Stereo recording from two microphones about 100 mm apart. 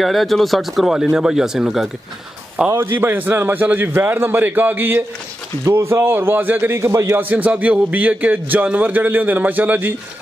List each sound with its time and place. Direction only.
0.0 s speech: centre (ahead or behind)
3.0 s a man's voice: 20° right (ahead or behind)